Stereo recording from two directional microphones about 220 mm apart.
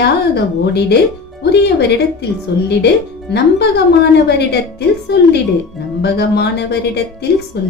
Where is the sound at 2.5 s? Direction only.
50° left (ahead or behind).